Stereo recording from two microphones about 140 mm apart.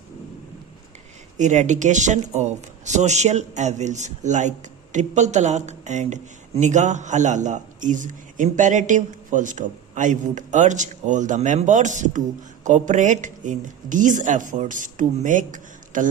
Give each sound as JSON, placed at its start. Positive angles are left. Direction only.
{"t": 1.4, "sound": "a man's voice", "side_deg": -60}